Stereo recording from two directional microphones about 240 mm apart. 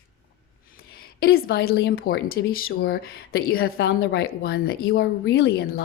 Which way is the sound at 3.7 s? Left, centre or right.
Left.